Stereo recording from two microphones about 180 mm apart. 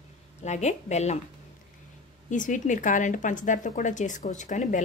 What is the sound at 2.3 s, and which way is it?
A woman's voice, 45° left (ahead or behind).